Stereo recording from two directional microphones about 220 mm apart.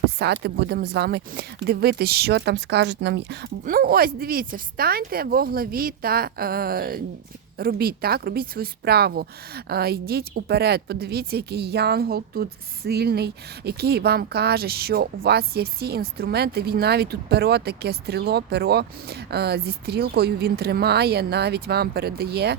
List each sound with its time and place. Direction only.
0.2 s a woman's voice: 50° right (ahead or behind)